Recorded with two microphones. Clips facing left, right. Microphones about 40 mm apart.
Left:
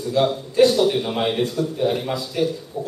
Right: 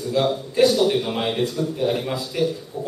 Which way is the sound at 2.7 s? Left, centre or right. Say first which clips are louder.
Left 1 dB; centre.